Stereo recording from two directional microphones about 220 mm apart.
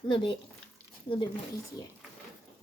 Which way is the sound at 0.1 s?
20° left (ahead or behind).